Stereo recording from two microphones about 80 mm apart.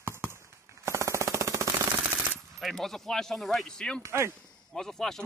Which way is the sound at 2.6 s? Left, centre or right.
Centre.